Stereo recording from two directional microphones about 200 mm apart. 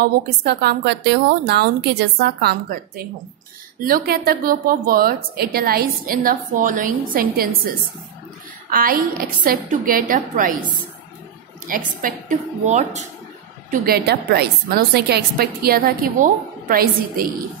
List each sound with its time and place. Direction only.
0.0 s a woman's voice: 55° right (ahead or behind)
3.8 s a woman's voice: 45° right (ahead or behind)
11.6 s a woman's voice: 40° right (ahead or behind)
13.7 s a woman's voice: 50° right (ahead or behind)